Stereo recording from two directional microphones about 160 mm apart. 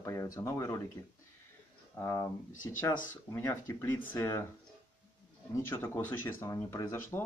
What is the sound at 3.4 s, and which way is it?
Speech, 15° left (ahead or behind).